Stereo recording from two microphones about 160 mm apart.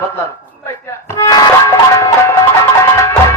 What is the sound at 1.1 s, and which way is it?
Music, 20° left (ahead or behind).